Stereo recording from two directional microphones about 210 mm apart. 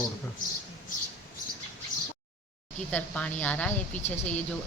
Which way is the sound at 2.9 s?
5° left (ahead or behind).